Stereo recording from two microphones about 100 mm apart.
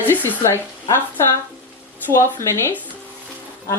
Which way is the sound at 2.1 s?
30° left (ahead or behind).